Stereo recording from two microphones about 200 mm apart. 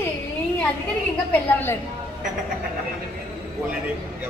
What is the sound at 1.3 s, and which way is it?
Speech, 10° left (ahead or behind).